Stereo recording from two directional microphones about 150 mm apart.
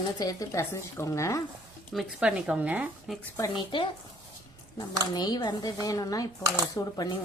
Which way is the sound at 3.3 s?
25° left (ahead or behind).